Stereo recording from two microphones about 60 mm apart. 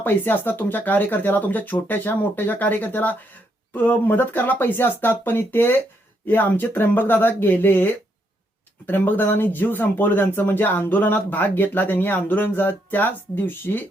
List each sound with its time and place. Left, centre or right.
0.0 s speech: left
8.9 s speech: left